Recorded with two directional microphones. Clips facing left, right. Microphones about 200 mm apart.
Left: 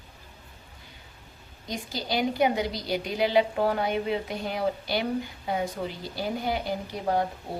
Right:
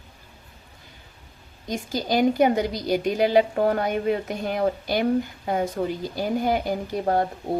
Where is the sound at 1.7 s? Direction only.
45° right (ahead or behind).